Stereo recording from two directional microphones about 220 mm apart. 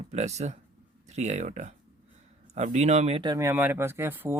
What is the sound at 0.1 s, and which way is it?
Speech, 30° right (ahead or behind).